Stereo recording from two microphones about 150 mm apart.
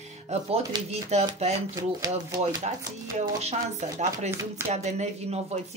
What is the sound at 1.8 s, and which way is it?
Speech, 25° right (ahead or behind).